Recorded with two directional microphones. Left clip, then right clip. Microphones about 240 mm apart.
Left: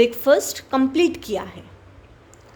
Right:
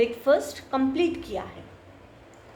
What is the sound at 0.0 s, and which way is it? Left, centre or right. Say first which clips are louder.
A woman's voice: left 6 dB; left.